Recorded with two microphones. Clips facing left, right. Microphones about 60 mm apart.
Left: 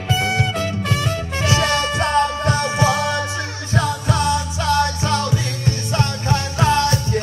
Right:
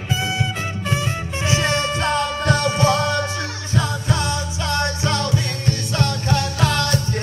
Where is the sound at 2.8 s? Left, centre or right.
Right.